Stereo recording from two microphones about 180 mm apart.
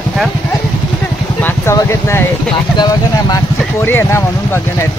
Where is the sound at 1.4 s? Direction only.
15° left (ahead or behind).